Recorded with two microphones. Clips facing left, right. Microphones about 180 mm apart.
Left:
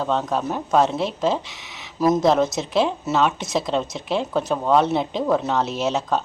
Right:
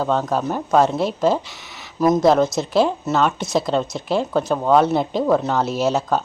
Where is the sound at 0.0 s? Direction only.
5° right (ahead or behind).